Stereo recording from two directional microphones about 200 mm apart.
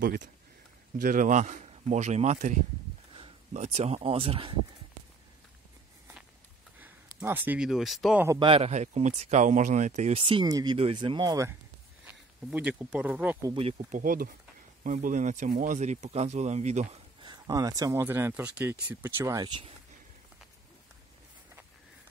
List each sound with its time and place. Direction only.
0.0 s speech: 40° right (ahead or behind); by 4.6 s 25° right (ahead or behind)
7.2 s speech: 10° right (ahead or behind)
8.3 s speech: 25° right (ahead or behind)
12.1 s speech: 5° right (ahead or behind)
13.5 s speech: 30° right (ahead or behind)
14.0 s speech: 45° right (ahead or behind)
17.2 s speech: 20° right (ahead or behind)